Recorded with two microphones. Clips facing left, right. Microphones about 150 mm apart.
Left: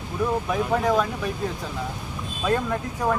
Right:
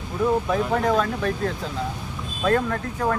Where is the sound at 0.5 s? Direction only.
5° left (ahead or behind).